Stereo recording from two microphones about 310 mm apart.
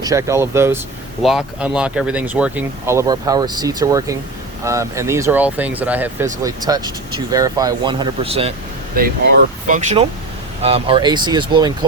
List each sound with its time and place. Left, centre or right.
0.0 s speech: centre